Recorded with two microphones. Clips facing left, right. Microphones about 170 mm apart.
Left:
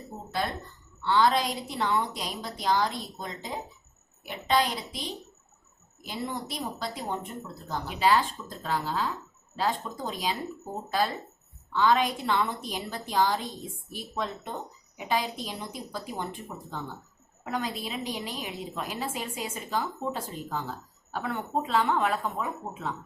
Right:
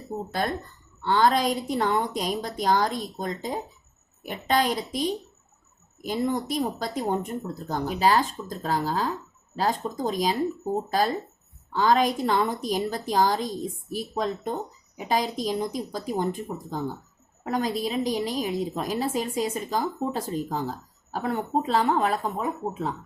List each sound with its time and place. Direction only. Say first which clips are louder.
0.4 s a woman's voice: right 2 dB; 50° right (ahead or behind)
11.7 s a woman's voice: right 3 dB; 40° right (ahead or behind)